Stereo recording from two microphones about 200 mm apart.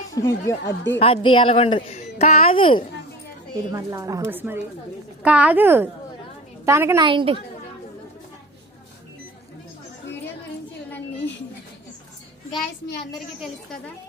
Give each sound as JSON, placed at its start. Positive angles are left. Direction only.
{"t": 0.1, "sound": "speech", "side_deg": 15}
{"t": 0.9, "sound": "speech", "side_deg": 30}
{"t": 3.7, "sound": "speech", "side_deg": -15}
{"t": 7.1, "sound": "a woman's voice", "side_deg": -25}
{"t": 13.1, "sound": "a woman's voice", "side_deg": 0}